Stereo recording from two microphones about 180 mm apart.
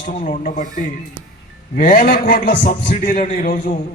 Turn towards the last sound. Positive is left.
turn(degrees=45)  # may be behind; listen again after turning